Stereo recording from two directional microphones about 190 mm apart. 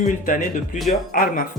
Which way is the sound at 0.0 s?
45° left (ahead or behind).